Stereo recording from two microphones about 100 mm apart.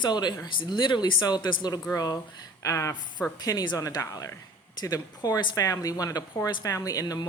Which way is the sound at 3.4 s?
40° left (ahead or behind).